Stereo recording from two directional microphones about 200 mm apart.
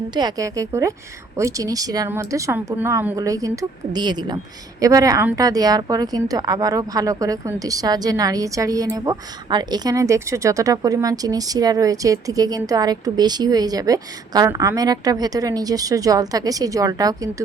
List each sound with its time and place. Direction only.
0.1 s a woman's voice: 20° right (ahead or behind)